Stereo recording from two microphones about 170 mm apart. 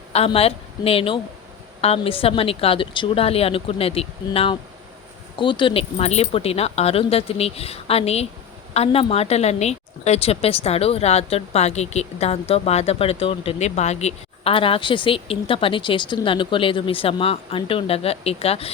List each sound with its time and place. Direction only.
0.3 s a woman's voice: 35° left (ahead or behind)